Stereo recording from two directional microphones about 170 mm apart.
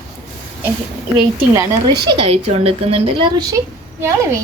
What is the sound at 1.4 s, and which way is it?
A woman's voice, 20° right (ahead or behind).